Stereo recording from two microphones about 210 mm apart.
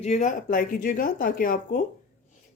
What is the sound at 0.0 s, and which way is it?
Speech, 35° left (ahead or behind).